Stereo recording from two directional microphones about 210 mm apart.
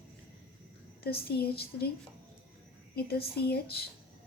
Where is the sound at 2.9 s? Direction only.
50° left (ahead or behind).